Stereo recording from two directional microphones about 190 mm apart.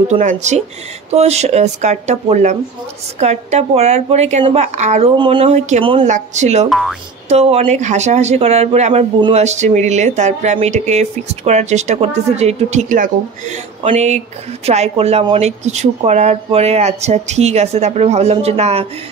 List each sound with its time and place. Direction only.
0.1 s speech: 40° right (ahead or behind)
5.1 s speech: 25° right (ahead or behind)
6.7 s speech: centre (ahead or behind)
7.2 s speech: 35° right (ahead or behind)